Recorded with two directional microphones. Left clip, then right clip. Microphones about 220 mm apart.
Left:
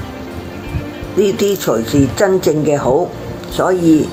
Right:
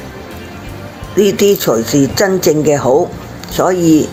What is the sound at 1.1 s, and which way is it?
Speech, 35° right (ahead or behind).